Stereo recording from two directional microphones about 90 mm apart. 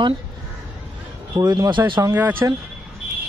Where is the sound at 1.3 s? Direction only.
45° right (ahead or behind).